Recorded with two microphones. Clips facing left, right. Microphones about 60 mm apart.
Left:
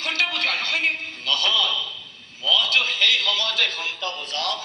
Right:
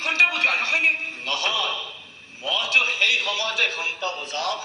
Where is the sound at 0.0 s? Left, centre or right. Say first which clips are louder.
Right 4 dB; centre.